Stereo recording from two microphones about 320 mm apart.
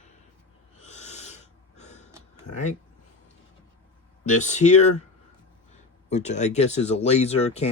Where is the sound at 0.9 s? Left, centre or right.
Left.